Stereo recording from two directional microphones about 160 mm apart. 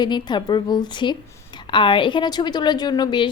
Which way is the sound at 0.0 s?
25° left (ahead or behind).